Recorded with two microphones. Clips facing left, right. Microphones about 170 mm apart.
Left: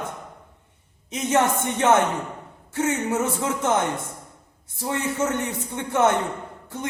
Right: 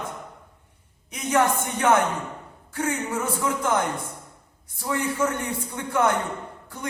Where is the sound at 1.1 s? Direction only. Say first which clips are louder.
Left 1 dB; 25° left (ahead or behind).